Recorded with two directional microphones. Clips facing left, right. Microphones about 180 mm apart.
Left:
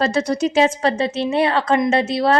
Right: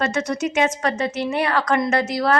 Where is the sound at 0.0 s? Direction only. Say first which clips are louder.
Left 4 dB; 35° left (ahead or behind).